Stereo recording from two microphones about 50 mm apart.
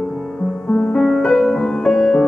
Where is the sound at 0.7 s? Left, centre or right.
Centre.